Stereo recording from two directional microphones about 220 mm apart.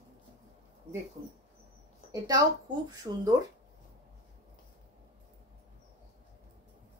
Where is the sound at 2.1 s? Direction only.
15° right (ahead or behind).